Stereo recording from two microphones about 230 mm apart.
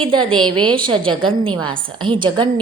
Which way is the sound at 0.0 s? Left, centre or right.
Right.